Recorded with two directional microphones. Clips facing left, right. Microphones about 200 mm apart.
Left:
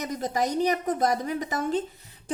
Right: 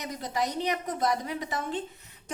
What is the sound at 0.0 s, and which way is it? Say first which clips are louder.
A woman's voice: left 4 dB; 45° left (ahead or behind).